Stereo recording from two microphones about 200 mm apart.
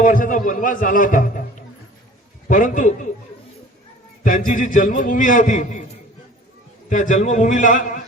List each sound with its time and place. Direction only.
0.0 s a man's voice: 40° left (ahead or behind)
4.2 s a man's voice: 40° left (ahead or behind)
6.9 s a man's voice: 40° left (ahead or behind)